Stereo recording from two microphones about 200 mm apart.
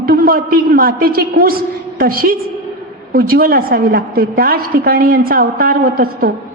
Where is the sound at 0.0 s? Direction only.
50° right (ahead or behind).